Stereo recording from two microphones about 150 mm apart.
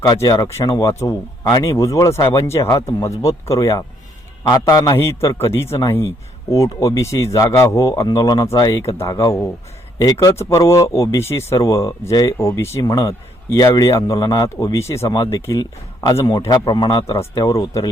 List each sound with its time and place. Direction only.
0.0 s speech: 25° left (ahead or behind)